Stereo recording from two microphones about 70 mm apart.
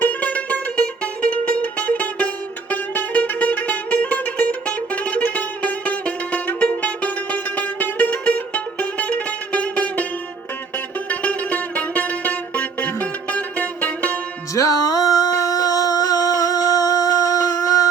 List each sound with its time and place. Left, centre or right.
0.0 s music: left
11.1 s music: centre
14.5 s a sound: left